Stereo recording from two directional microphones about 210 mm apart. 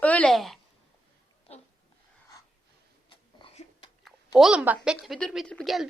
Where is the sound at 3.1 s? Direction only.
25° left (ahead or behind).